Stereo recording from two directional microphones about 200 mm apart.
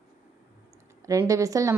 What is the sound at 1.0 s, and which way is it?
Speech, 15° right (ahead or behind).